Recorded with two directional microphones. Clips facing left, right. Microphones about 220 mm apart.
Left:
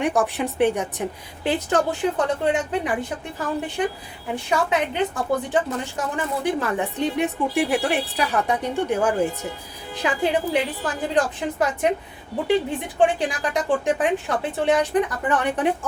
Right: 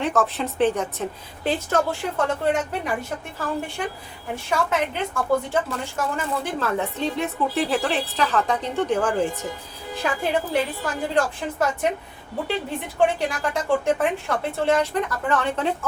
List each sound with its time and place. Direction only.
0.0 s a woman's voice: 15° left (ahead or behind)
13.0 s a woman's voice: 20° left (ahead or behind)